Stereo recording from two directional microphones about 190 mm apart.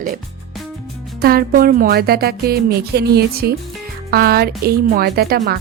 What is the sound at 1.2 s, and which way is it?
Speech, 50° right (ahead or behind).